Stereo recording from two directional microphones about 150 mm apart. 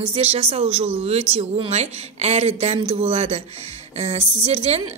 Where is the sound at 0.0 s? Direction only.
40° right (ahead or behind).